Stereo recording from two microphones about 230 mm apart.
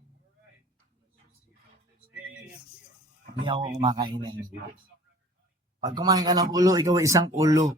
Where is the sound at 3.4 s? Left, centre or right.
Right.